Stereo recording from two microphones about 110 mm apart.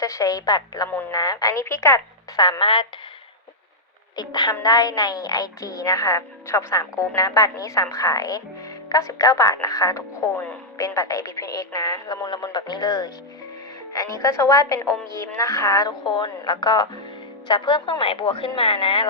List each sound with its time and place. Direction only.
0.0 s a woman's voice: 30° left (ahead or behind)
2.4 s speech: 45° left (ahead or behind)
4.1 s a woman's voice: 35° left (ahead or behind)
16.0 s a woman's voice: 40° left (ahead or behind)